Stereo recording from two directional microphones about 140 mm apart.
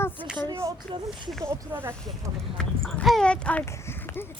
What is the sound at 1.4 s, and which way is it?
Speech, 15° right (ahead or behind).